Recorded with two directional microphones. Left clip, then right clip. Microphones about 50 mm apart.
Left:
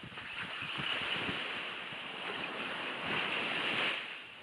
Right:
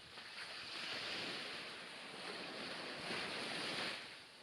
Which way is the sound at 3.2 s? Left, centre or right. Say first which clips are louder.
Left 11 dB; centre.